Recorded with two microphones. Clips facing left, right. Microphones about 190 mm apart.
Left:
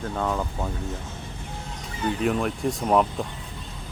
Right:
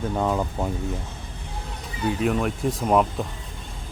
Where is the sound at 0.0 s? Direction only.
15° right (ahead or behind).